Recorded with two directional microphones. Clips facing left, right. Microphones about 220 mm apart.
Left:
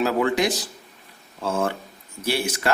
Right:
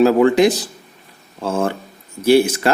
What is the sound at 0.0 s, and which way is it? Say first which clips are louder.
Speech: right 9 dB; 35° right (ahead or behind).